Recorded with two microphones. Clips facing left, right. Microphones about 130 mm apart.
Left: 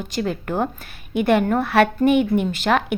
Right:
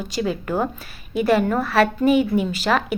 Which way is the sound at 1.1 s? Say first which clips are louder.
Left 1 dB; 60° left (ahead or behind).